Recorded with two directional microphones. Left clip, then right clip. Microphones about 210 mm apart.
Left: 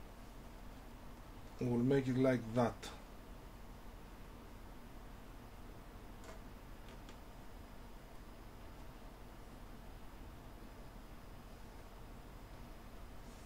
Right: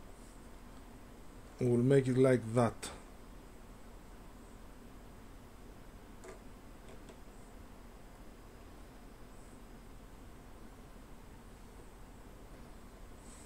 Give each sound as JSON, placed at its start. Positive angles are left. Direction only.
{"t": 1.6, "sound": "speech", "side_deg": -50}